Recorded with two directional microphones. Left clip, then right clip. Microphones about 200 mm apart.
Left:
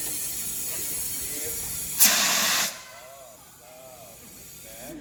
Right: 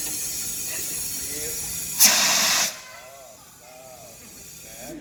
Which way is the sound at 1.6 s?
15° left (ahead or behind).